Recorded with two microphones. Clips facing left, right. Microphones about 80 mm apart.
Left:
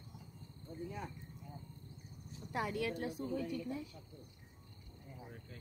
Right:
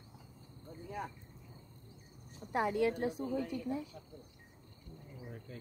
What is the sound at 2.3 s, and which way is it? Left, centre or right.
Speech, right.